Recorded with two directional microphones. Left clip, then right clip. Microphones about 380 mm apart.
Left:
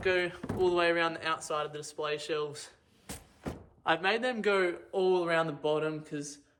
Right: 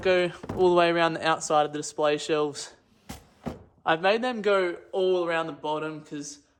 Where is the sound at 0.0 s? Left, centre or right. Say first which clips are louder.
Right 6 dB; centre.